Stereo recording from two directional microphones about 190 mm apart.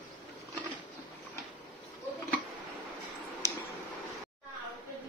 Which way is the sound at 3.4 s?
15° left (ahead or behind).